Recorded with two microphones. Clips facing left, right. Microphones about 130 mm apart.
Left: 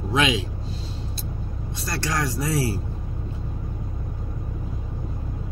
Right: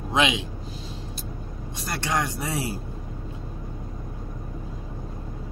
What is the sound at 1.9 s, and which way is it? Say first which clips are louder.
Speech: even; 20° right (ahead or behind).